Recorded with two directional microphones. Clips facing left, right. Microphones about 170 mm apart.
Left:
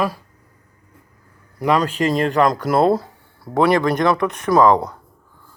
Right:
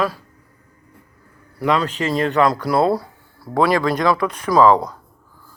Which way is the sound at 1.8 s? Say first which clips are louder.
Left 3 dB; 40° left (ahead or behind).